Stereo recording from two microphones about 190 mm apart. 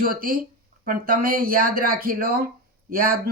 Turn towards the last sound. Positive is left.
turn(degrees=-50)  # may be behind; listen again after turning